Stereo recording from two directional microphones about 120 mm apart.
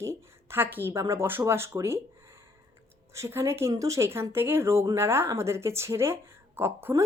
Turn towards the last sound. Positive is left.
turn(degrees=-20)  # may be behind; listen again after turning